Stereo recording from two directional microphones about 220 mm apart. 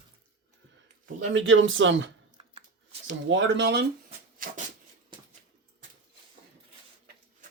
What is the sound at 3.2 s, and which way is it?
Speech, 55° right (ahead or behind).